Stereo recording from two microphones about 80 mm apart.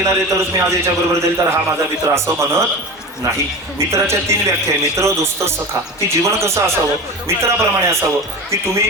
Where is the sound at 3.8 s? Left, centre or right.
Right.